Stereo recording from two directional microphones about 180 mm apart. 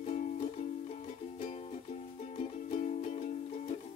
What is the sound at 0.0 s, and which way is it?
Music, 40° left (ahead or behind).